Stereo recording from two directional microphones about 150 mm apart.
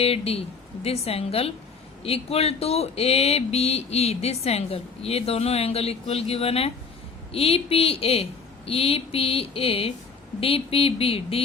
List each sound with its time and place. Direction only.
0.0 s a woman's voice: 40° left (ahead or behind)